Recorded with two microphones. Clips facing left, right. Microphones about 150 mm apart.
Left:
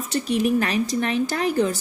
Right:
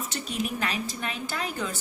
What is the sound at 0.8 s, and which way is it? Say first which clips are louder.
Speech: left 11 dB; 40° left (ahead or behind).